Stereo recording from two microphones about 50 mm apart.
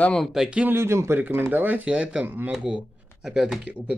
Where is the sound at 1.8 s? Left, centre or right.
Right.